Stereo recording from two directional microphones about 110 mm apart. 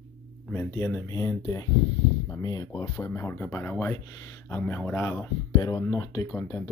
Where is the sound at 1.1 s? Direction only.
30° left (ahead or behind).